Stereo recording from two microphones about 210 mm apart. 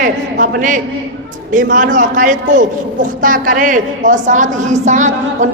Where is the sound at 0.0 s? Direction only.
45° right (ahead or behind).